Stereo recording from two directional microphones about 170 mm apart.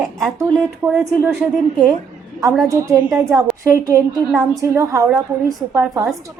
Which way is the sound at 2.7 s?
20° right (ahead or behind).